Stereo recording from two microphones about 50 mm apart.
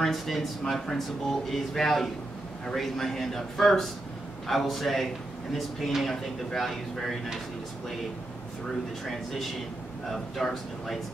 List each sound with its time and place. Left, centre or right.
0.0 s speech: centre
10.0 s speech: centre